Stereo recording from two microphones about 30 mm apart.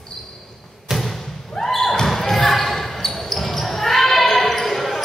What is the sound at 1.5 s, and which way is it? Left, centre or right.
Basketball bounce, centre.